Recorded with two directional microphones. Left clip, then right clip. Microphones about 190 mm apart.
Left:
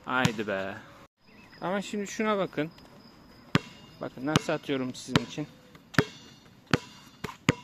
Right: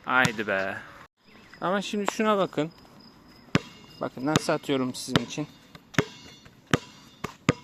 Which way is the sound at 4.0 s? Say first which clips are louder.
Right 3 dB; 40° right (ahead or behind).